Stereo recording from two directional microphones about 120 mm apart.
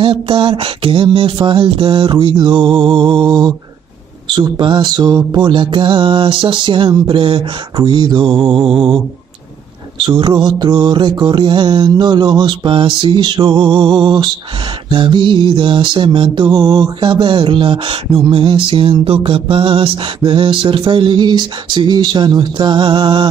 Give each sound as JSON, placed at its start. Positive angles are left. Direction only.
{"t": 0.0, "sound": "mantra", "side_deg": -45}
{"t": 9.9, "sound": "mantra", "side_deg": -40}